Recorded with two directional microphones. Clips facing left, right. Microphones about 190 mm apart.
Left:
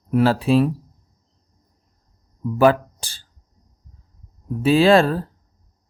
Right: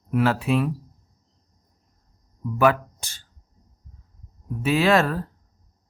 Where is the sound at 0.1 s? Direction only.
30° left (ahead or behind).